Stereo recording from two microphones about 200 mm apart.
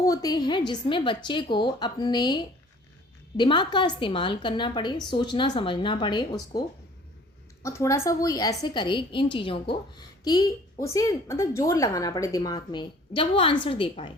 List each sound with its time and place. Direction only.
0.0 s a woman's voice: 15° left (ahead or behind)
7.6 s a woman's voice: 15° left (ahead or behind)